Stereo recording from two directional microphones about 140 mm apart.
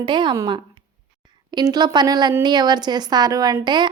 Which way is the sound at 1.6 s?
30° right (ahead or behind).